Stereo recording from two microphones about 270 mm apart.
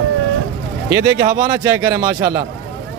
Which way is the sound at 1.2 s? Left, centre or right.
Centre.